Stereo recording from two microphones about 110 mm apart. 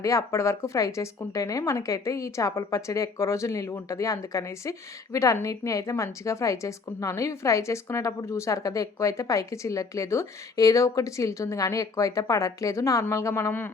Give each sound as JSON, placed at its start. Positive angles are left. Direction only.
{"t": 0.0, "sound": "a woman's voice", "side_deg": 30}